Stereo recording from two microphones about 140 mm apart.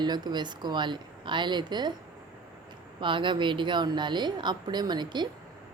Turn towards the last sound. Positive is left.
turn(degrees=-30)  # may be behind; listen again after turning